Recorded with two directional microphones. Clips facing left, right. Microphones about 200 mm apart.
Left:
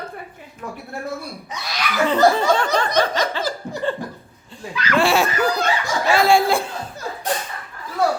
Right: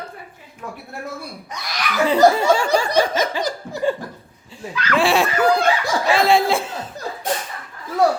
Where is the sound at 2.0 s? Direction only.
10° right (ahead or behind).